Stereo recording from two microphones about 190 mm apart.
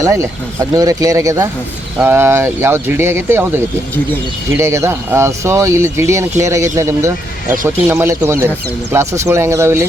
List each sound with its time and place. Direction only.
0.0 s speech: 15° right (ahead or behind)